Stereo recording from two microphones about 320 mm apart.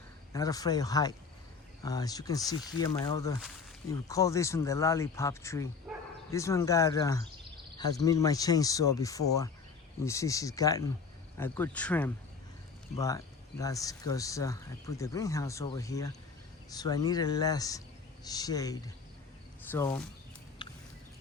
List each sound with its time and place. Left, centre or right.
0.3 s speech: centre
5.9 s bow-wow: centre
6.3 s speech: centre
20.6 s a sound: centre